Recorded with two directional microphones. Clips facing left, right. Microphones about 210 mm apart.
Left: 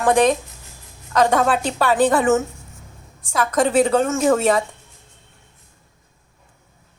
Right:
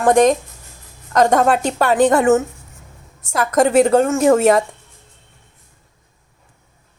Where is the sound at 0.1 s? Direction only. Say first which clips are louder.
Right 3 dB; 45° right (ahead or behind).